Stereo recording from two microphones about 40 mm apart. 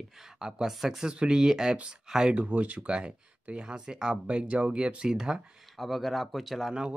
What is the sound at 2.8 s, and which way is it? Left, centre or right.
Speech, right.